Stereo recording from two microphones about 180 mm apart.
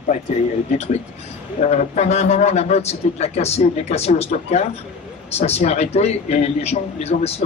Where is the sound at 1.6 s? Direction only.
40° left (ahead or behind).